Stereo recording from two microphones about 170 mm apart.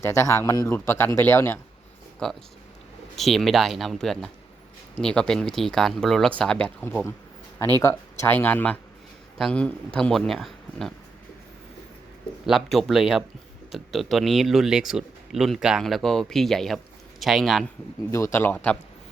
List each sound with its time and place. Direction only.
0.0 s speech: 15° left (ahead or behind); by 10.9 s centre (ahead or behind)
12.5 s speech: centre (ahead or behind)
18.1 s speech: 15° left (ahead or behind)